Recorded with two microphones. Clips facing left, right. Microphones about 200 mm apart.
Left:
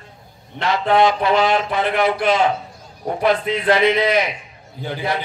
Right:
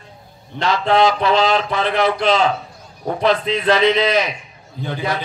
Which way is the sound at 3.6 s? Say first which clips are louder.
Right 1 dB; 25° left (ahead or behind).